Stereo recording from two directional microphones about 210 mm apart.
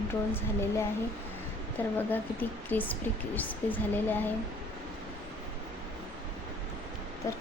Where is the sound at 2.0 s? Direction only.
10° left (ahead or behind).